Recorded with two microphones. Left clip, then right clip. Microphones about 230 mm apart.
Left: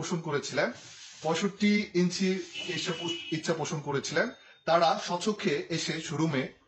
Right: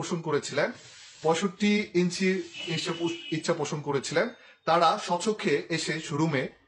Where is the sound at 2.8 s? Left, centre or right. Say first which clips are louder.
Right 3 dB; right.